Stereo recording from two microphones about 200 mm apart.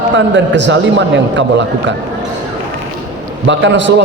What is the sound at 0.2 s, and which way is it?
A man's voice, 65° right (ahead or behind).